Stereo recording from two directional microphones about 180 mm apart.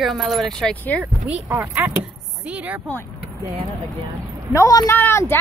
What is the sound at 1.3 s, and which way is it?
Speech, 10° right (ahead or behind).